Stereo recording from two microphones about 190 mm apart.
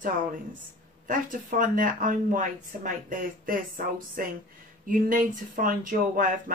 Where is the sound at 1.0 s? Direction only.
45° right (ahead or behind).